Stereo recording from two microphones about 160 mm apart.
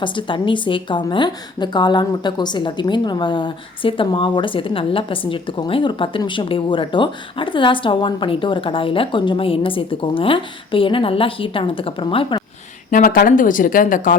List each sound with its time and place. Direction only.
0.0 s a woman's voice: 30° left (ahead or behind)
12.9 s speech: 65° left (ahead or behind)